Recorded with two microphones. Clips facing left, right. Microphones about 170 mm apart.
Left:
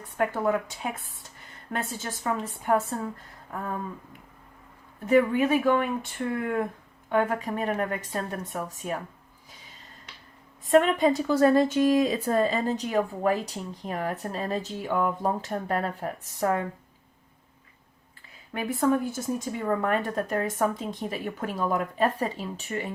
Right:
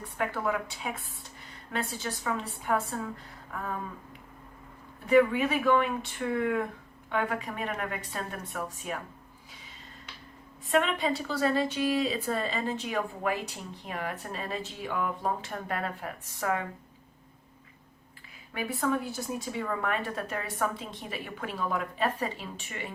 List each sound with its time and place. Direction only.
0.2 s speech: 45° left (ahead or behind)
5.0 s a woman's voice: 45° left (ahead or behind)
10.7 s a woman's voice: 45° left (ahead or behind)
18.7 s speech: 50° left (ahead or behind)